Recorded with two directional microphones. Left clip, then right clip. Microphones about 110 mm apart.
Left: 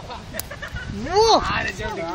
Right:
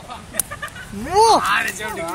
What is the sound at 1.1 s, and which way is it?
Speech, 50° right (ahead or behind).